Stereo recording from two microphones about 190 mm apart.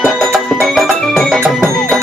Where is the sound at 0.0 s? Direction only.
5° right (ahead or behind).